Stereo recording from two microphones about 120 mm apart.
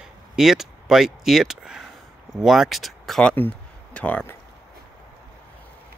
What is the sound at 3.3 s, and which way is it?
Speech, 15° left (ahead or behind).